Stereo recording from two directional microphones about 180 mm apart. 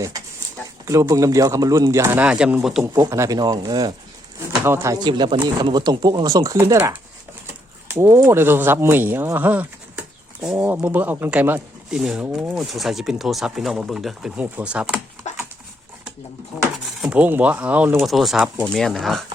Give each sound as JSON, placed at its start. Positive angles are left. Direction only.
{"t": 0.9, "sound": "a man's voice", "side_deg": -15}
{"t": 2.8, "sound": "a man's voice", "side_deg": -15}
{"t": 15.3, "sound": "dog", "side_deg": 40}
{"t": 17.0, "sound": "a man's voice", "side_deg": -10}